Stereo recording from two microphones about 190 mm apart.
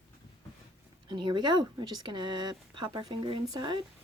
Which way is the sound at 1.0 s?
25° right (ahead or behind).